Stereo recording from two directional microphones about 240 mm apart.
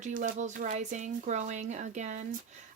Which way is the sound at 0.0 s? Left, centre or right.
Right.